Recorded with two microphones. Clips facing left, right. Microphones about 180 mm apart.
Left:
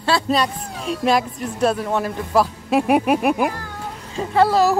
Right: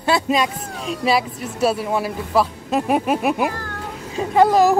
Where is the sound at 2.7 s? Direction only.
10° left (ahead or behind).